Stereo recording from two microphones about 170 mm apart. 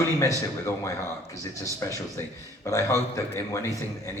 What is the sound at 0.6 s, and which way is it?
A man's voice, 15° left (ahead or behind).